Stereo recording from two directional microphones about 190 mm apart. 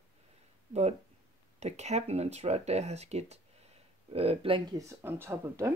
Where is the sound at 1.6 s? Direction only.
35° right (ahead or behind).